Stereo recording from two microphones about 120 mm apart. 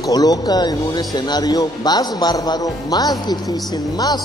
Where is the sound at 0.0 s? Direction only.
30° left (ahead or behind).